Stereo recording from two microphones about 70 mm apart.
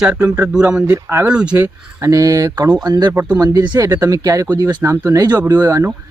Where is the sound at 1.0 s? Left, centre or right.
Right.